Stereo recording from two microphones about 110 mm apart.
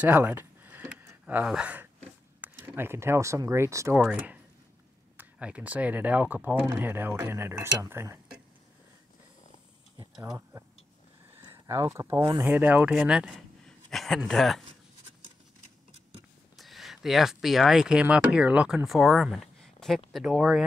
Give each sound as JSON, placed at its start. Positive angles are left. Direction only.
{"t": 0.0, "sound": "a sound", "side_deg": -15}
{"t": 2.4, "sound": "speech", "side_deg": -20}
{"t": 3.9, "sound": "speech", "side_deg": -10}
{"t": 10.1, "sound": "speech", "side_deg": -5}
{"t": 11.4, "sound": "speech", "side_deg": -35}
{"t": 12.4, "sound": "a man's voice", "side_deg": -15}
{"t": 16.5, "sound": "speech", "side_deg": 0}
{"t": 18.9, "sound": "speech", "side_deg": 0}